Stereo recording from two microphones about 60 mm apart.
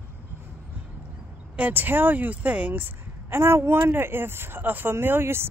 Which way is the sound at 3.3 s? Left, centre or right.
Right.